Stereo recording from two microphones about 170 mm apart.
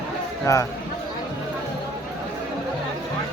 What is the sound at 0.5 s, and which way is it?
Speech, 20° left (ahead or behind).